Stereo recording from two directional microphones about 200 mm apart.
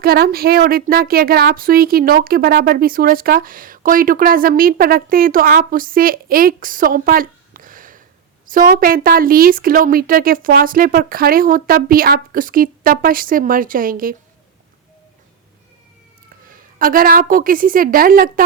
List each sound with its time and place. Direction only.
0.0 s a woman's voice: 50° right (ahead or behind)
16.5 s a woman's voice: 45° right (ahead or behind)